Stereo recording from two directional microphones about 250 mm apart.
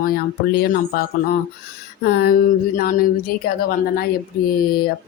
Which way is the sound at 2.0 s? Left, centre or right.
Left.